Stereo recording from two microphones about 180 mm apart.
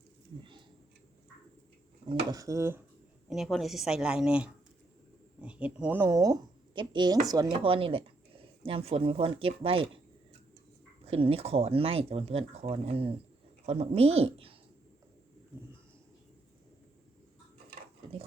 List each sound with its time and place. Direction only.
2.0 s speech: 20° right (ahead or behind)
3.2 s a woman's voice: centre (ahead or behind); by 10.0 s 30° right (ahead or behind)
11.0 s speech: 30° right (ahead or behind)